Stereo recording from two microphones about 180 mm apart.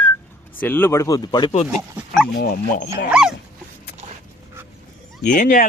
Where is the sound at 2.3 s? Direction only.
50° left (ahead or behind).